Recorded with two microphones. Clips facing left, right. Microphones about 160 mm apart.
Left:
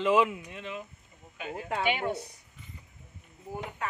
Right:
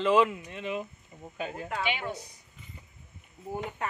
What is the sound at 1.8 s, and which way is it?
Speech, 50° left (ahead or behind).